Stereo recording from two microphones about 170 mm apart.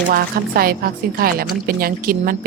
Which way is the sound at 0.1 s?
60° right (ahead or behind).